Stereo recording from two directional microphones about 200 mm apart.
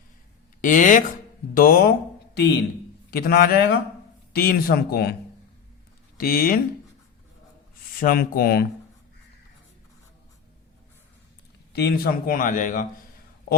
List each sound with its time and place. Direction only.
0.6 s speech: 40° left (ahead or behind)
3.1 s speech: 50° left (ahead or behind)
6.1 s speech: 45° left (ahead or behind)
7.9 s speech: 45° left (ahead or behind)
11.7 s speech: 50° left (ahead or behind)